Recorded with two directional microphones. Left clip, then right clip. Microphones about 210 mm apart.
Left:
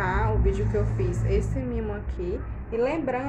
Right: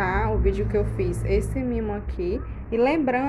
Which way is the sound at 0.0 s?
25° right (ahead or behind).